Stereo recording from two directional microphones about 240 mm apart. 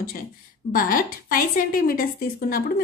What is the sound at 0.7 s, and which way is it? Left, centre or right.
A woman's voice, left.